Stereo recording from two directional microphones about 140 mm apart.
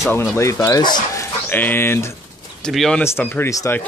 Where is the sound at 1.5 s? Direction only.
15° left (ahead or behind).